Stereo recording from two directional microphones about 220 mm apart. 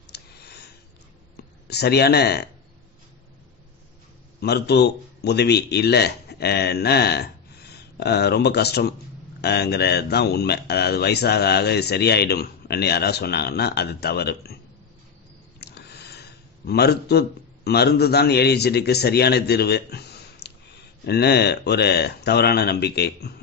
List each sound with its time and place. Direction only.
0.0 s a sound: 45° left (ahead or behind)
1.3 s speech: 45° left (ahead or behind)
4.4 s a man's voice: 50° left (ahead or behind)
15.6 s speech: 50° left (ahead or behind)